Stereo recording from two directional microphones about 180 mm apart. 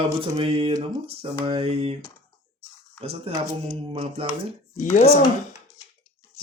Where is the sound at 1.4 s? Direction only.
35° right (ahead or behind).